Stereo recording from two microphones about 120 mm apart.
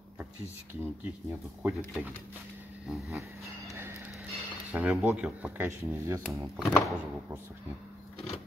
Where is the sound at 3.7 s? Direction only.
20° right (ahead or behind).